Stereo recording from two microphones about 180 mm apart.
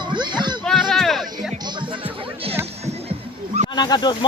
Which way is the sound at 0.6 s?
Centre (ahead or behind).